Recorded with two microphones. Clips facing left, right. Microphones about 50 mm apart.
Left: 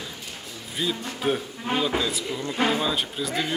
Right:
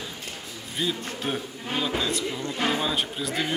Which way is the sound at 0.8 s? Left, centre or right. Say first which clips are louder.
Left 2 dB; centre.